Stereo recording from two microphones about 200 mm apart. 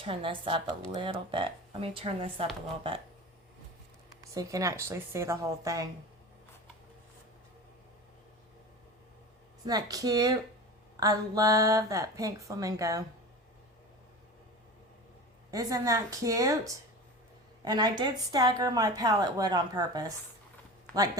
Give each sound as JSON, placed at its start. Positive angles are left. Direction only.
{"t": 0.0, "sound": "a woman's voice", "side_deg": -25}
{"t": 4.2, "sound": "a woman's voice", "side_deg": -15}
{"t": 9.6, "sound": "a woman's voice", "side_deg": -20}
{"t": 15.4, "sound": "a woman's voice", "side_deg": -15}